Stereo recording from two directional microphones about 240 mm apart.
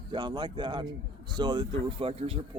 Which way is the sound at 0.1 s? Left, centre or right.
Centre.